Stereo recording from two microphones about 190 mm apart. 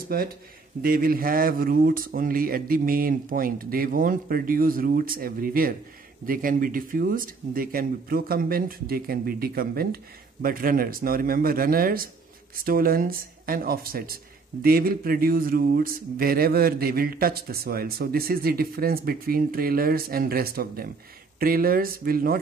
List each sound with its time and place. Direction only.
0.1 s speech: 50° right (ahead or behind)